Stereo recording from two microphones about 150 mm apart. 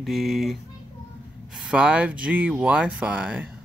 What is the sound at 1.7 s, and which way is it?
Speech, 5° right (ahead or behind).